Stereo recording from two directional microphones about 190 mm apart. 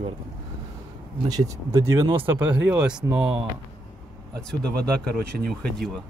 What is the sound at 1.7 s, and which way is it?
Speech, 15° right (ahead or behind).